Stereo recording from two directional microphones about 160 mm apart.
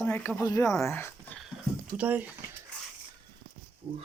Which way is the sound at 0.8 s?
15° left (ahead or behind).